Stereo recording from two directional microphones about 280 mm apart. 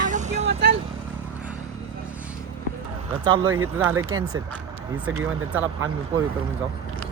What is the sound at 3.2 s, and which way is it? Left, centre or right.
A man's voice, centre.